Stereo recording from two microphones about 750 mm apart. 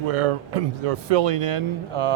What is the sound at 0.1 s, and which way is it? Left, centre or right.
Speech, right.